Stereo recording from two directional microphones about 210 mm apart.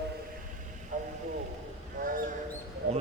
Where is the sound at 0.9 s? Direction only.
40° right (ahead or behind).